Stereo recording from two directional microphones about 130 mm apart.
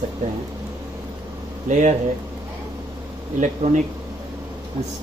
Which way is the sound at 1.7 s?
65° right (ahead or behind).